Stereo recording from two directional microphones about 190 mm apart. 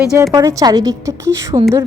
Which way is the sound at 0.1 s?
15° right (ahead or behind).